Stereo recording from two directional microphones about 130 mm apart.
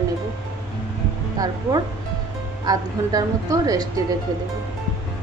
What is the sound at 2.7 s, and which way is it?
A woman's voice, 30° right (ahead or behind).